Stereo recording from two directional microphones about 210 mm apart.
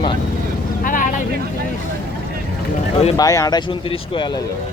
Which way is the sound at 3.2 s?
15° left (ahead or behind).